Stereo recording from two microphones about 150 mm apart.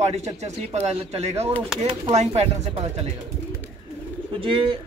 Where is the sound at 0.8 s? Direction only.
45° right (ahead or behind).